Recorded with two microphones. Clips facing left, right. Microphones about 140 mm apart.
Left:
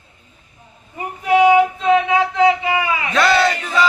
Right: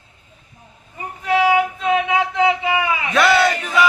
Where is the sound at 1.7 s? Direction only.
10° right (ahead or behind).